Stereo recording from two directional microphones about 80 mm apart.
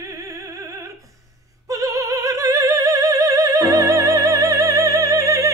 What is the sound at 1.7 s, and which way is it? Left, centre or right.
Opera, right.